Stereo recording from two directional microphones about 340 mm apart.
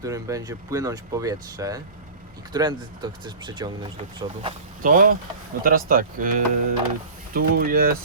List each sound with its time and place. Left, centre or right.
0.0 s speech: centre; by 7.9 s right